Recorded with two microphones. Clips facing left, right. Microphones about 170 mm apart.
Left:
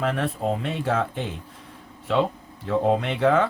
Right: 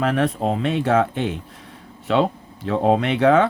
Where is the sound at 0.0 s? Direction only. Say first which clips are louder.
Right 5 dB; 80° right.